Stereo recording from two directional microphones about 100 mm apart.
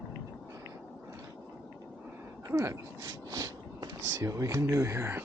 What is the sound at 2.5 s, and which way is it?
Speech, 30° right (ahead or behind).